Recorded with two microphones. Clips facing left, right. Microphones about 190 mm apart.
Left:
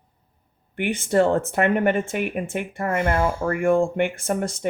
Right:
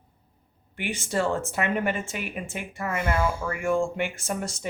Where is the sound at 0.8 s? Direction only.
55° left (ahead or behind).